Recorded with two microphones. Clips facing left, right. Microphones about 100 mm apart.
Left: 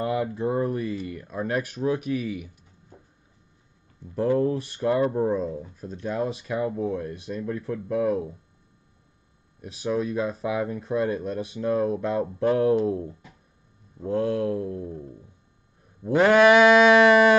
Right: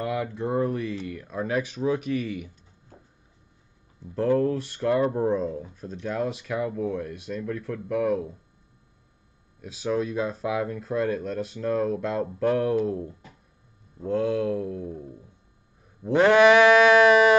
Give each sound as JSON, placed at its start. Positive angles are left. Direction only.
{"t": 0.0, "sound": "a sound", "side_deg": 20}
{"t": 0.5, "sound": "speech", "side_deg": 5}
{"t": 4.1, "sound": "speech", "side_deg": 10}
{"t": 5.1, "sound": "speech", "side_deg": 5}
{"t": 5.9, "sound": "speech", "side_deg": 20}
{"t": 9.8, "sound": "speech", "side_deg": 5}
{"t": 13.9, "sound": "speech", "side_deg": 5}
{"t": 16.1, "sound": "speech", "side_deg": 5}